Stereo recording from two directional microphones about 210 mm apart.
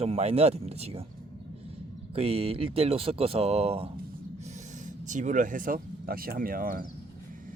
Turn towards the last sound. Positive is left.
turn(degrees=-40)  # may be behind; listen again after turning